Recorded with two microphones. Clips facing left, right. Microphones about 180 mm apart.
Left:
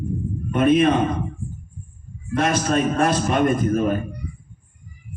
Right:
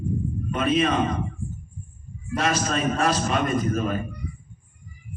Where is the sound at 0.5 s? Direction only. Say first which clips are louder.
Left 6 dB; 55° left (ahead or behind).